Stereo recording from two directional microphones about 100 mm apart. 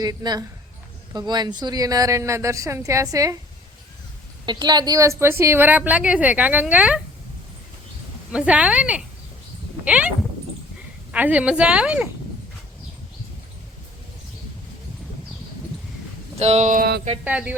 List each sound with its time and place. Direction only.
0.0 s speech: 40° right (ahead or behind)
4.4 s a woman's voice: 45° right (ahead or behind); by 7.0 s 15° right (ahead or behind)
8.3 s a woman's voice: 10° right (ahead or behind)
11.1 s a woman's voice: 15° right (ahead or behind)
16.4 s speech: 90° right
17.2 s a woman's voice: 15° right (ahead or behind)